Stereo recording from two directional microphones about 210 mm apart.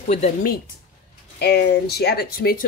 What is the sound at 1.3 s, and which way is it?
Speech, 50° left (ahead or behind).